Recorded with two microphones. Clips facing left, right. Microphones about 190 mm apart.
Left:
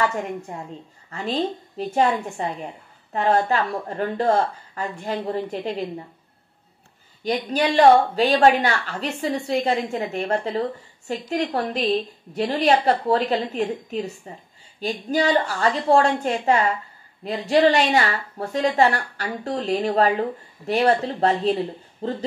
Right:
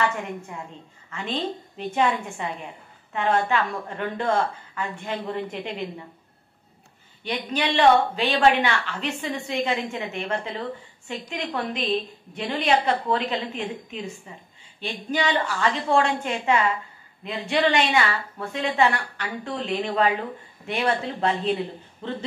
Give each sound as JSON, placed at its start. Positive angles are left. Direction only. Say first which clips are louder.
{"t": 0.5, "sound": "a woman's voice", "louder": "left 3 dB", "side_deg": 40}
{"t": 7.2, "sound": "a woman's voice", "louder": "left 5 dB", "side_deg": 40}